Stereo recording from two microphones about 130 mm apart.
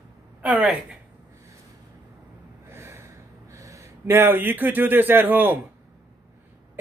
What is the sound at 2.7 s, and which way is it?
Gasp, 20° right (ahead or behind).